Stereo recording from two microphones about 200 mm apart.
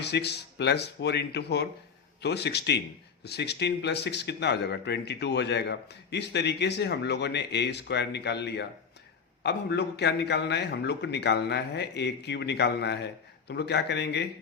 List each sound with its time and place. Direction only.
0.0 s speech: 55° left (ahead or behind)